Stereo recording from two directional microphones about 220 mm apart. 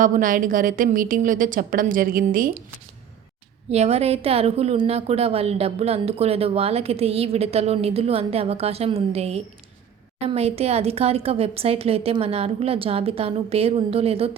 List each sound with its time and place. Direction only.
0.0 s a woman's voice: 35° right (ahead or behind)
3.7 s a woman's voice: 30° right (ahead or behind)